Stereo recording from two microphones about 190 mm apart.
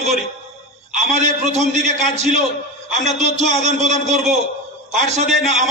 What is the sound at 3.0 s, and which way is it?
A man's voice, 35° right (ahead or behind).